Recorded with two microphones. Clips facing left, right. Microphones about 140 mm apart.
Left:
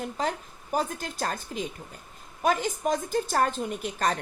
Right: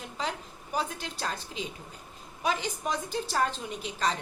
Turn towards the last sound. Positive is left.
turn(degrees=50)  # may be behind; listen again after turning